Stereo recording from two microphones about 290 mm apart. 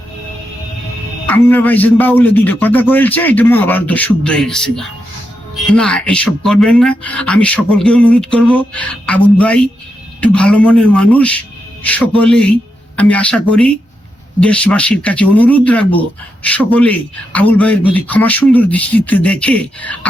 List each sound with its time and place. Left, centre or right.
1.3 s speech: centre